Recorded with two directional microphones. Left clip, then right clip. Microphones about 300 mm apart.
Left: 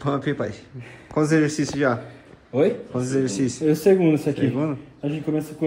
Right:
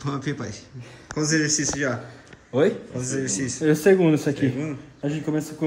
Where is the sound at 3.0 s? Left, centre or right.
Left.